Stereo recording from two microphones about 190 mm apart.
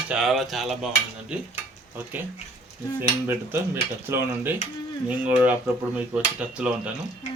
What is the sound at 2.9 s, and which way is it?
Speech, 10° right (ahead or behind).